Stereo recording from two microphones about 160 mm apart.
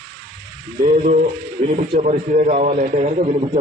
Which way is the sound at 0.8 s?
50° right (ahead or behind).